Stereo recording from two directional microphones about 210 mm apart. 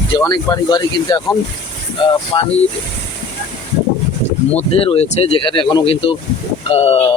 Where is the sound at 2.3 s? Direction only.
25° left (ahead or behind).